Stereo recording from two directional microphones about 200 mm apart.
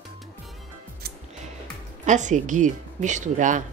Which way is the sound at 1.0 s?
50° right (ahead or behind).